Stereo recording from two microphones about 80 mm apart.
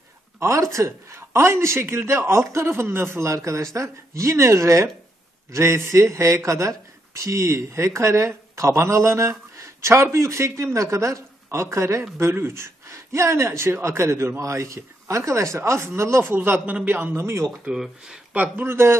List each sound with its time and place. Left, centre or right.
0.4 s a man's voice: right
17.2 s speech: right
17.6 s speech: centre
18.3 s a man's voice: right